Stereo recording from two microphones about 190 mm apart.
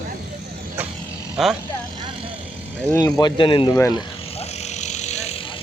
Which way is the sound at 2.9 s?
20° left (ahead or behind).